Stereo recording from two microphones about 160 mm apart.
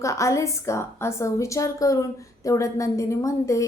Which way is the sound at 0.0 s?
20° left (ahead or behind).